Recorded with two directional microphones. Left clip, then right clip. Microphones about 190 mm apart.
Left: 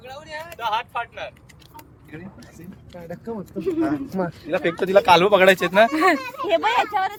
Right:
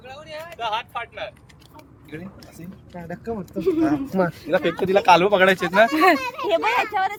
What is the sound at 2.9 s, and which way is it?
Speech, 55° right (ahead or behind).